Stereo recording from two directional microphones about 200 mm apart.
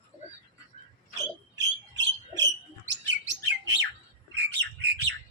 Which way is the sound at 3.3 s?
60° right (ahead or behind).